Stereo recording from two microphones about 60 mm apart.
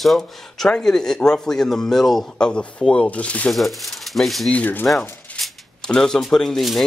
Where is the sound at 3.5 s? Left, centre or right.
Centre.